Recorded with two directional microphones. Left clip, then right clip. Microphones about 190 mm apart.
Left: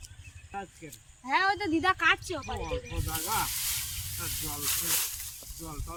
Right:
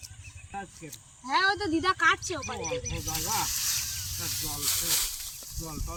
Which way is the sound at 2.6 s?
25° right (ahead or behind).